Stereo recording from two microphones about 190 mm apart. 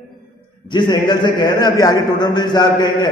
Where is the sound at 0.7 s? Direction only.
25° left (ahead or behind).